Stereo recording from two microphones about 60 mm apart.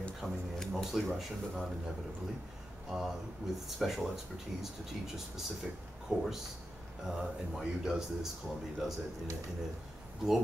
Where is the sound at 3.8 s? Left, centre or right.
Centre.